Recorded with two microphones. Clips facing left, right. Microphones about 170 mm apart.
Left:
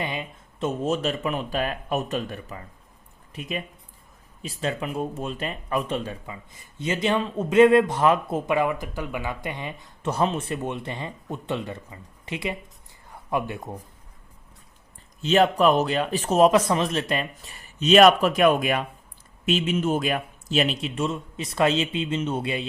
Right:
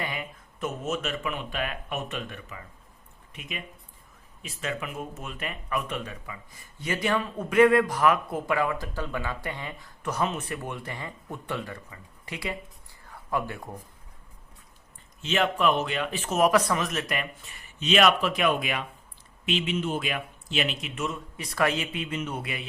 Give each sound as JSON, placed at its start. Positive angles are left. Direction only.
{"t": 0.0, "sound": "speech", "side_deg": 20}
{"t": 15.2, "sound": "speech", "side_deg": 35}